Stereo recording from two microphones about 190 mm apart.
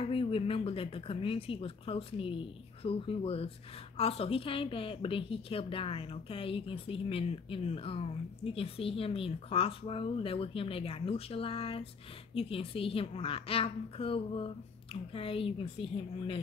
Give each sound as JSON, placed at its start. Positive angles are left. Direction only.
{"t": 0.0, "sound": "speech", "side_deg": 30}